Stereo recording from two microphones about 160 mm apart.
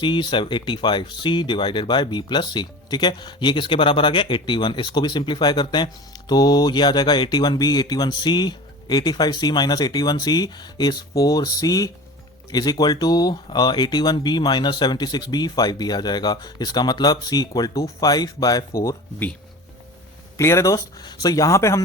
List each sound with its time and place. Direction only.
0.0 s speech: 30° left (ahead or behind)
20.4 s speech: 20° left (ahead or behind)